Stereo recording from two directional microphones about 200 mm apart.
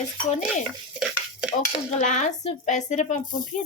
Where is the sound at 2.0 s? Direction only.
35° left (ahead or behind).